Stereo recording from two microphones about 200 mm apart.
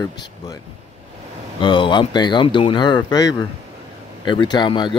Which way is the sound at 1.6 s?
25° left (ahead or behind).